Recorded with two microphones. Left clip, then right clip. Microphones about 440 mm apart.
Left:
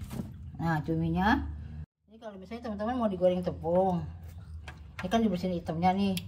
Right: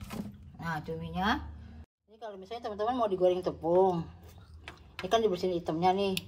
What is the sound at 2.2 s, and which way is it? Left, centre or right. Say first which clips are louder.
Speech: right 2 dB; centre.